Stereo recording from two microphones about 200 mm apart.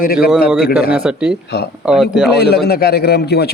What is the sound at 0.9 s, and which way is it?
A man's voice, 5° right (ahead or behind).